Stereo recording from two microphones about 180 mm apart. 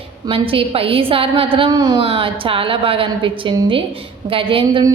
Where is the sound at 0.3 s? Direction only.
30° right (ahead or behind).